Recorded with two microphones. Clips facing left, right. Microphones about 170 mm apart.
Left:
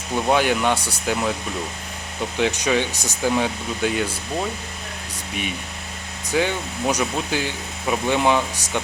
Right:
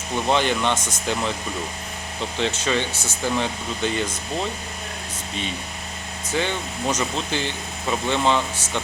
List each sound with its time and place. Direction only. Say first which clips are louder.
0.3 s speech: left 2 dB; 10° left (ahead or behind)
0.8 s speech: even; 35° left (ahead or behind)
2.4 s speech: left 3 dB; 15° left (ahead or behind)
5.3 s speech: left 2 dB; 15° left (ahead or behind)